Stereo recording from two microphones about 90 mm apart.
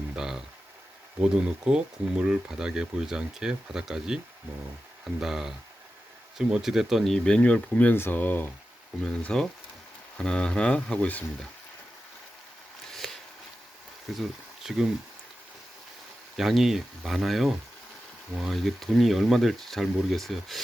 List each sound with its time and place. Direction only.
1.5 s speech: 10° right (ahead or behind)
5.2 s speech: 5° right (ahead or behind); by 8.4 s 20° left (ahead or behind)
9.0 s speech: 10° left (ahead or behind)
12.9 s a sound: 5° left (ahead or behind)
14.1 s speech: 5° right (ahead or behind)
16.4 s speech: 5° right (ahead or behind)